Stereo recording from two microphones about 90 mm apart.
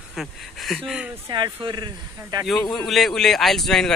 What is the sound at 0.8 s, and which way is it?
Speech, 5° right (ahead or behind).